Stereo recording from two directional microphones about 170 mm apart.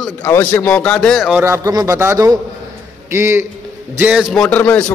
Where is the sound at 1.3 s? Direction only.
15° right (ahead or behind).